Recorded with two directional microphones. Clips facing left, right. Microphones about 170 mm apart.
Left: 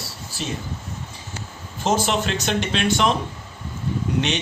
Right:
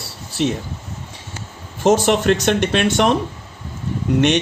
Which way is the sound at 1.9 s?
55° right (ahead or behind).